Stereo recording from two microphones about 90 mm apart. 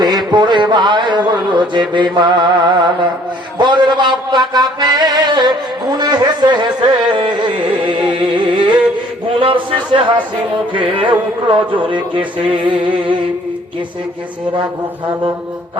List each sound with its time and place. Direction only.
0.0 s music: 50° right (ahead or behind)
9.4 s a man's voice: 80° right
10.7 s music: 70° right (ahead or behind)